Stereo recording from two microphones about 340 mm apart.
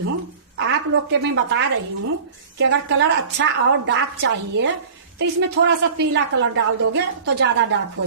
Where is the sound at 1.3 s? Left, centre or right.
Right.